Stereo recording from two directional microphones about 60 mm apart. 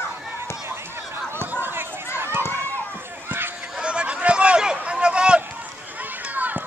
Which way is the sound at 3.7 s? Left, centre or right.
Centre.